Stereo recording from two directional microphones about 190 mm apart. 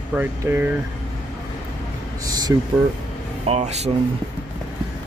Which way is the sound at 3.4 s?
35° right (ahead or behind).